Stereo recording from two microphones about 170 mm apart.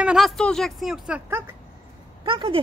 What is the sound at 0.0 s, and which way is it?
Speech, centre (ahead or behind).